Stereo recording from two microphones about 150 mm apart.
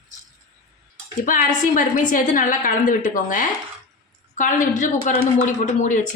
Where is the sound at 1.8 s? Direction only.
60° left (ahead or behind).